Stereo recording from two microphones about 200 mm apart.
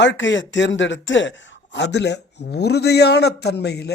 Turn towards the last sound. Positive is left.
turn(degrees=55)  # may be behind; listen again after turning